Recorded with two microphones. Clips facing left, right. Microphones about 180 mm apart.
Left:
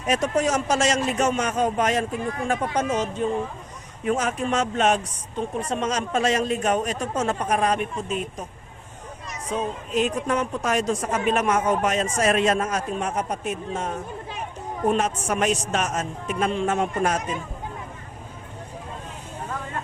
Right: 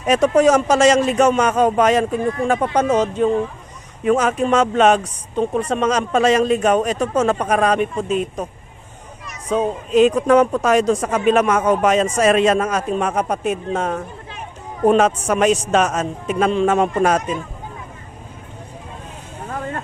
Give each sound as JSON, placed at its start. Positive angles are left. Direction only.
{"t": 0.1, "sound": "speech", "side_deg": -80}
{"t": 2.6, "sound": "speech", "side_deg": -70}
{"t": 4.0, "sound": "speech", "side_deg": -90}
{"t": 5.4, "sound": "speech", "side_deg": -75}
{"t": 9.5, "sound": "speech", "side_deg": -85}